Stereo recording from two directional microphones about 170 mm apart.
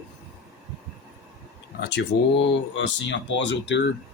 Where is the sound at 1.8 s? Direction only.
90° left.